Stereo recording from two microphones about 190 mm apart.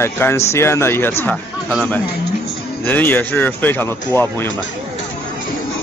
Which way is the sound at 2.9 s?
10° left (ahead or behind).